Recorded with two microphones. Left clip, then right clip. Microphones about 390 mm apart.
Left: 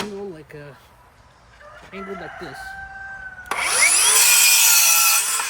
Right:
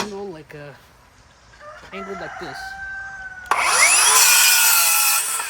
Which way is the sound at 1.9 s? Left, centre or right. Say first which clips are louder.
Right 2 dB; centre.